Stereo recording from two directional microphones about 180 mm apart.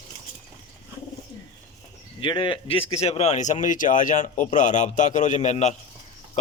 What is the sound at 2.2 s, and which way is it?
Speech, 25° left (ahead or behind).